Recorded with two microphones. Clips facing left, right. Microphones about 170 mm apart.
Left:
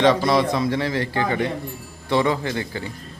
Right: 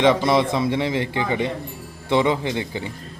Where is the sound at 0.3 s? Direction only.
20° right (ahead or behind).